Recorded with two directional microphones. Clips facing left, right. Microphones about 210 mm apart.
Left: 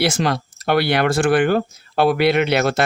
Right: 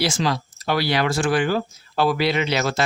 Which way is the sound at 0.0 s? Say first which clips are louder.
Left 3 dB; 60° left (ahead or behind).